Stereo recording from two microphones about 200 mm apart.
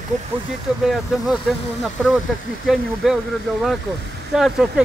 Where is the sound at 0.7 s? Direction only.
Centre (ahead or behind).